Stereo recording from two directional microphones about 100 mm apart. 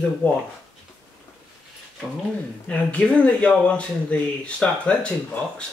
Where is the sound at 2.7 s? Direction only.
10° left (ahead or behind).